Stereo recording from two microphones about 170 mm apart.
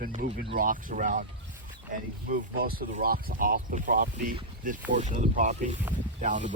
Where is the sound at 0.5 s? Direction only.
55° right (ahead or behind).